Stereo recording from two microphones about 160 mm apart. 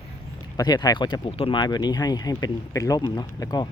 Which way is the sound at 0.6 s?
25° left (ahead or behind).